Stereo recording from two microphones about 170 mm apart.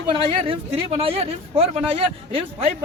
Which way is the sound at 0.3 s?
35° right (ahead or behind).